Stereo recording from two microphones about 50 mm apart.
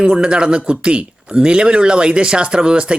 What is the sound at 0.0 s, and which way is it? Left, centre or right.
Speech, centre.